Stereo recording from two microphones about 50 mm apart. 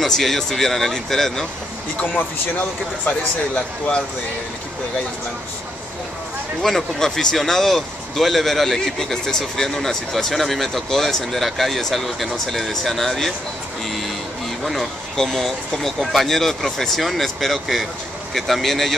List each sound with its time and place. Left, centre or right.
0.0 s speech: centre
2.0 s speech: left
3.1 s speech: left
6.6 s a man's voice: centre
14.6 s a man's voice: centre